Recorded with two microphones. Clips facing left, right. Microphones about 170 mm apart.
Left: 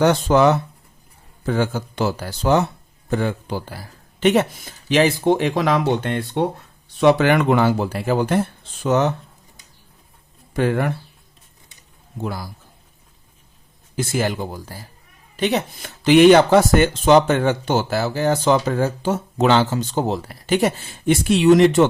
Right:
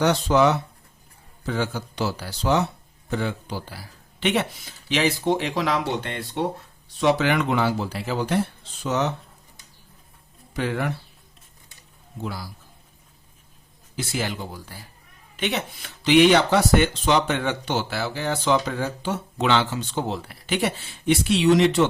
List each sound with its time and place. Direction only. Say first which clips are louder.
0.0 s speech: left 4 dB; 50° left (ahead or behind)
10.5 s speech: left 6 dB; 50° left (ahead or behind)
12.2 s speech: left 5 dB; 50° left (ahead or behind)
13.9 s speech: left 6 dB; 50° left (ahead or behind)